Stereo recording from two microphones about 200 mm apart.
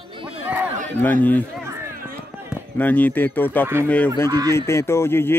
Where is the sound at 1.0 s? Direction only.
10° left (ahead or behind).